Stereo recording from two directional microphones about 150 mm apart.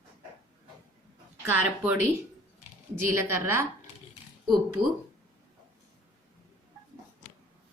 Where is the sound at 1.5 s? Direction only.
15° right (ahead or behind).